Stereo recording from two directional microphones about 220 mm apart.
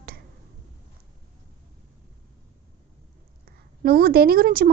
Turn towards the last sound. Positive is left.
turn(degrees=-40)  # may be behind; listen again after turning